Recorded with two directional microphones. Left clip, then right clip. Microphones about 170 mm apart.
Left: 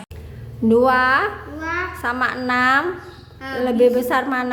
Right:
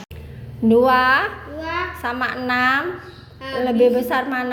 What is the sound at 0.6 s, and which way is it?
A child's voice, 15° left (ahead or behind).